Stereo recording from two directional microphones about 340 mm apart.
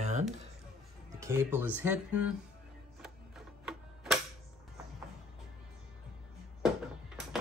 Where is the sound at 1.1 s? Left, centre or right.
Centre.